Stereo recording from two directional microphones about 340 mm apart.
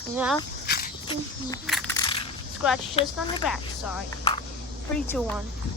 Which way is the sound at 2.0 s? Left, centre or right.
Centre.